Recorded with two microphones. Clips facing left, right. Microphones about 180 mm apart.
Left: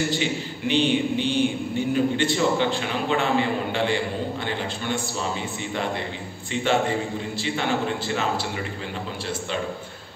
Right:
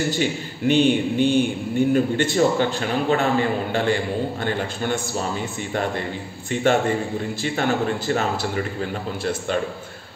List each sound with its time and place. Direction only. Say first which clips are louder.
0.2 s a man's voice: right 4 dB; 45° right (ahead or behind)
6.5 s a man's voice: right 3 dB; 50° right (ahead or behind)